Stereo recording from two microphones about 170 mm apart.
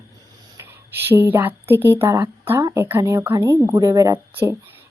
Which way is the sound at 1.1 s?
10° right (ahead or behind).